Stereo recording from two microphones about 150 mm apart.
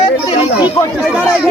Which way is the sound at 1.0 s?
5° right (ahead or behind).